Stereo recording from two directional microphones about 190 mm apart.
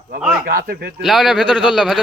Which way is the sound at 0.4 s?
50° right (ahead or behind).